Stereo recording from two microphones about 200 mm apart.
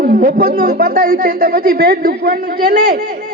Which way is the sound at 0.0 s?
45° right (ahead or behind).